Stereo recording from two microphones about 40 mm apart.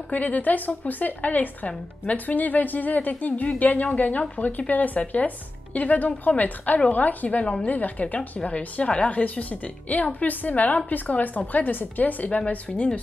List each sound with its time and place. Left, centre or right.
0.1 s a woman's voice: left
9.2 s a woman's voice: left
12.4 s speech: left